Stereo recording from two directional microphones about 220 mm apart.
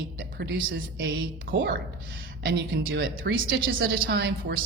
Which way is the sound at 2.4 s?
50° right (ahead or behind).